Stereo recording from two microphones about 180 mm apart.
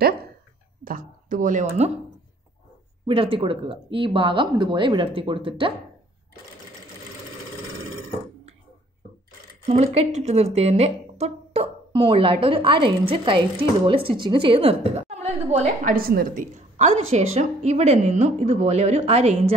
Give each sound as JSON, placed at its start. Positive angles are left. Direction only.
{"t": 0.8, "sound": "speech", "side_deg": -50}
{"t": 3.2, "sound": "speech", "side_deg": -30}
{"t": 9.7, "sound": "a woman's voice", "side_deg": -35}
{"t": 16.5, "sound": "a woman's voice", "side_deg": -40}